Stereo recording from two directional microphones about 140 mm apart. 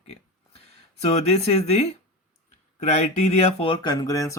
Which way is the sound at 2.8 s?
50° left (ahead or behind).